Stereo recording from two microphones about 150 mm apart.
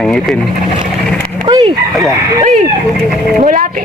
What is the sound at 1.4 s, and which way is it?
Chicken, 30° right (ahead or behind).